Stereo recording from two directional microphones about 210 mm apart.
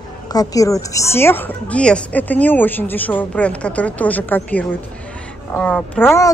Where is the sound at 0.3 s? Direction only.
15° left (ahead or behind).